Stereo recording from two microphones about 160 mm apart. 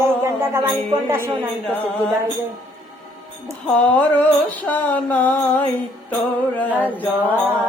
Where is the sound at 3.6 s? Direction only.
10° left (ahead or behind).